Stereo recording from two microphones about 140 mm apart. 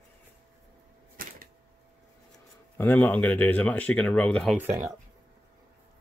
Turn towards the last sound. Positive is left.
turn(degrees=-15)  # may be behind; listen again after turning